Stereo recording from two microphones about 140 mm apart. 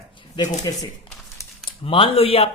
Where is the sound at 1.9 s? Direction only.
40° left (ahead or behind).